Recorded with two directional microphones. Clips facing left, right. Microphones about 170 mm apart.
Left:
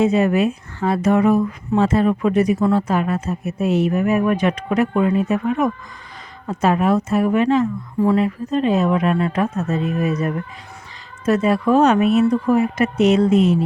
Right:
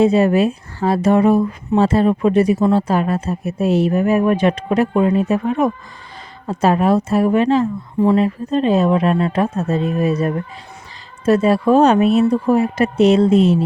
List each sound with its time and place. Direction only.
0.0 s speech: 30° right (ahead or behind)